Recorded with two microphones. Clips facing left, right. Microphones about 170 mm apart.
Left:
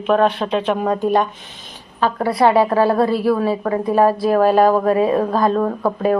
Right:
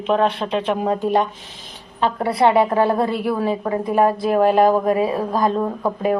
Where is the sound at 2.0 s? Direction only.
25° right (ahead or behind).